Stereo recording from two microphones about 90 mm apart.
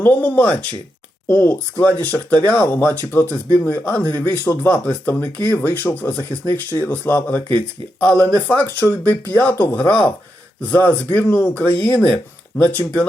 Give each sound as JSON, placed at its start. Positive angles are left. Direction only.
{"t": 0.0, "sound": "speech", "side_deg": 20}